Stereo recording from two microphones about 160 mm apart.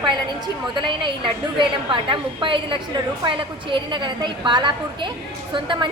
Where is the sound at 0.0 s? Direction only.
30° right (ahead or behind).